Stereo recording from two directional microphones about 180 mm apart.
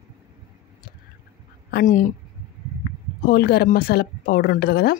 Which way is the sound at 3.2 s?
60° left (ahead or behind).